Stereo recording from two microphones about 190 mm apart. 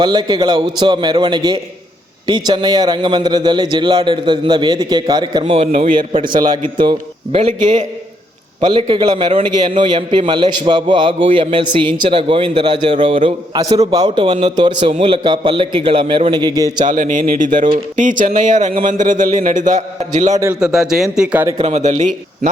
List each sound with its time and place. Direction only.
0.0 s a man's voice: 20° right (ahead or behind)
7.3 s a man's voice: 35° right (ahead or behind); by 16.8 s 20° right (ahead or behind)
16.8 s a man's voice: 45° right (ahead or behind)
20.3 s a man's voice: 15° right (ahead or behind)
20.6 s a man's voice: centre (ahead or behind)
21.6 s a man's voice: 35° right (ahead or behind)